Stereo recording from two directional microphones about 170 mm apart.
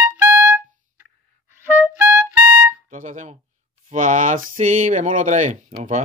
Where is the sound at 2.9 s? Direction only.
45° right (ahead or behind).